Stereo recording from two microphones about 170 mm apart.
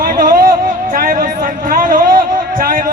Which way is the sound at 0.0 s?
55° right (ahead or behind).